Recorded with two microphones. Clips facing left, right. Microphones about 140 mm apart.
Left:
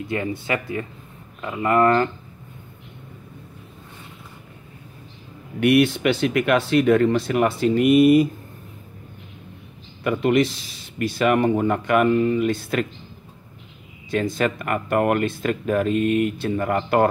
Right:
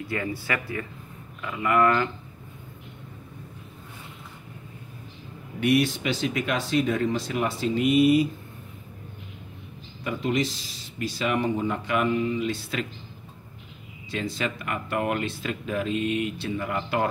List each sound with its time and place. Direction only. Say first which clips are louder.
0.0 s speech: left 4 dB; 20° left (ahead or behind)
1.4 s speech: left 4 dB; 35° left (ahead or behind)
5.6 s speech: left 6 dB; 65° left (ahead or behind)
10.0 s speech: left 7 dB; 60° left (ahead or behind)
14.1 s speech: left 8 dB; 50° left (ahead or behind)